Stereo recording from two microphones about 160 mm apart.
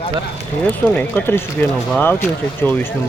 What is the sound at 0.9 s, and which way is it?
Speech, 10° left (ahead or behind).